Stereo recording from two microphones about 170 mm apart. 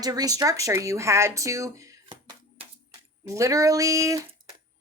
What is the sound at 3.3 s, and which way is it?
Speech, 20° right (ahead or behind).